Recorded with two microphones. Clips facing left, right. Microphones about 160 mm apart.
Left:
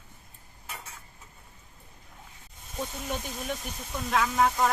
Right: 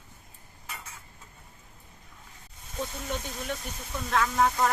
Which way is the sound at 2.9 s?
10° left (ahead or behind).